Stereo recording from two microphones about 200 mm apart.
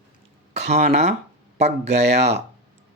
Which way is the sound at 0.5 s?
35° right (ahead or behind).